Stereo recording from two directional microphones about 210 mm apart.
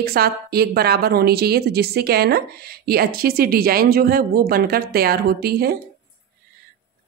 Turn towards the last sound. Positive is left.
turn(degrees=-50)  # may be behind; listen again after turning